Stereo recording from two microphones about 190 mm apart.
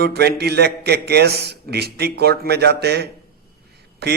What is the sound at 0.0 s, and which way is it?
A man's voice, 60° right (ahead or behind).